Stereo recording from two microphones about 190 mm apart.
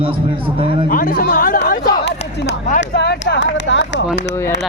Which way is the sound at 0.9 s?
45° left (ahead or behind).